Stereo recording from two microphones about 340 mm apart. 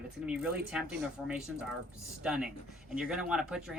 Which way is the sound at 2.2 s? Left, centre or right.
Centre.